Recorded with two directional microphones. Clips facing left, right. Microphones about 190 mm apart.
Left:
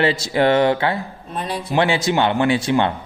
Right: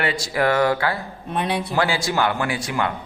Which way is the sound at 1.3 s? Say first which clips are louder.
Right 2 dB; 65° right (ahead or behind).